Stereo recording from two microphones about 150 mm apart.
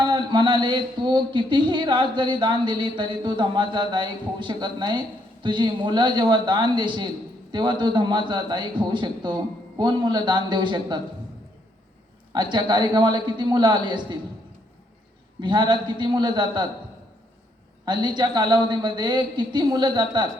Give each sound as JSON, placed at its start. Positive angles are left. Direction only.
{"t": 0.0, "sound": "a sound", "side_deg": -30}
{"t": 9.7, "sound": "a woman's voice", "side_deg": -30}
{"t": 12.3, "sound": "a woman's voice", "side_deg": -30}
{"t": 15.4, "sound": "a woman's voice", "side_deg": -30}
{"t": 17.8, "sound": "a woman's voice", "side_deg": -30}